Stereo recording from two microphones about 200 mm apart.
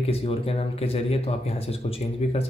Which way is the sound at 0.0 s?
30° left (ahead or behind).